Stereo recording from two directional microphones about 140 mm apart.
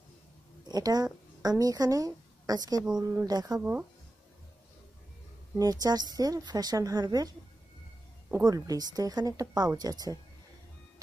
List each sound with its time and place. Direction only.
0.7 s a woman's voice: 25° right (ahead or behind)
5.6 s a woman's voice: 25° right (ahead or behind)
8.5 s a woman's voice: 25° right (ahead or behind)